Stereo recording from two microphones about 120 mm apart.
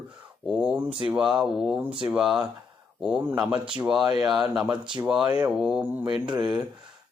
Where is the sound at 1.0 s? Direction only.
5° right (ahead or behind).